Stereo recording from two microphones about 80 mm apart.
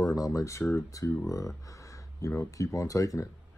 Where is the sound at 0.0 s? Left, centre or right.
Left.